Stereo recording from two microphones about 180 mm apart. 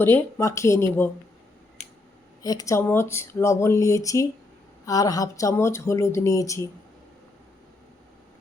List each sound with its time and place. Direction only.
0.0 s speech: 10° left (ahead or behind)
2.4 s speech: 20° left (ahead or behind)